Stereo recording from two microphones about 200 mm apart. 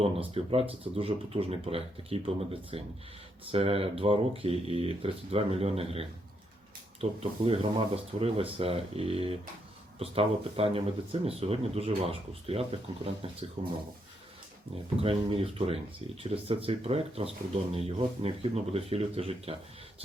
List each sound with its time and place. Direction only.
0.0 s speech: 30° right (ahead or behind)
15.0 s speech: 30° right (ahead or behind)